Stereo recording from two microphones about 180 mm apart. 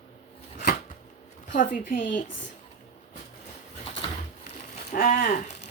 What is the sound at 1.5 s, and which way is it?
Speech, 50° left (ahead or behind).